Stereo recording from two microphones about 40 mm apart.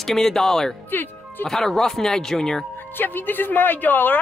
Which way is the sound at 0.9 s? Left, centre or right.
Left.